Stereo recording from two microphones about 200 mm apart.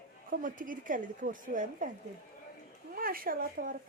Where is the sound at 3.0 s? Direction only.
45° right (ahead or behind).